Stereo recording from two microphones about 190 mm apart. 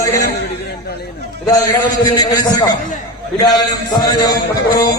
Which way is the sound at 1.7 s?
20° left (ahead or behind).